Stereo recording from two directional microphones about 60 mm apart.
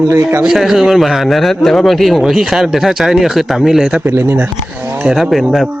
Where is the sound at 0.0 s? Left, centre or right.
Right.